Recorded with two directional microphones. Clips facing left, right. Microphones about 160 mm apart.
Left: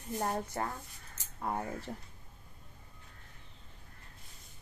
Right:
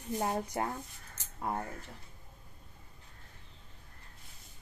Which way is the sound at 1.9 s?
45° left (ahead or behind).